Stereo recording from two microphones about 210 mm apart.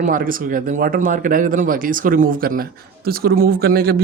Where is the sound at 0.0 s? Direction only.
40° right (ahead or behind).